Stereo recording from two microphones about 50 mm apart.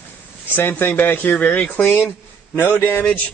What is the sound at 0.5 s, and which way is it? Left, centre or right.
Speech, left.